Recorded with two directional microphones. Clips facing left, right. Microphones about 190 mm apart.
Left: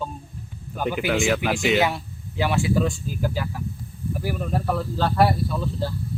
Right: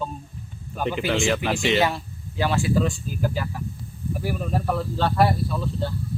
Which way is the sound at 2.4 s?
15° left (ahead or behind).